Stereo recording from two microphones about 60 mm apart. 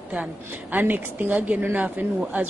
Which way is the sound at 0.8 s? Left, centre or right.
Right.